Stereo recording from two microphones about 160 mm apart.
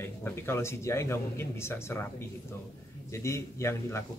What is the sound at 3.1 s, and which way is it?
Speech, 15° left (ahead or behind).